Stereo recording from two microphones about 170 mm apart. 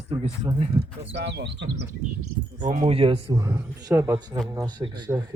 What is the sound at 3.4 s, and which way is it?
Speech, 20° right (ahead or behind).